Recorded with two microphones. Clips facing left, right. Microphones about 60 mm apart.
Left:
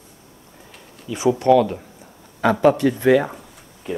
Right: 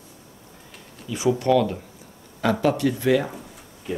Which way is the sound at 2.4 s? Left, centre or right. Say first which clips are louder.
Left 5 dB; left.